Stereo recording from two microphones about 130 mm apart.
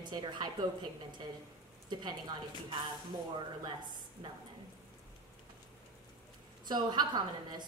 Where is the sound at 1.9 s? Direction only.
35° right (ahead or behind).